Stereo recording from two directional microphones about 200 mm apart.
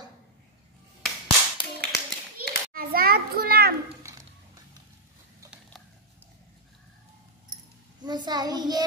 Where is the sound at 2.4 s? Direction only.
45° right (ahead or behind).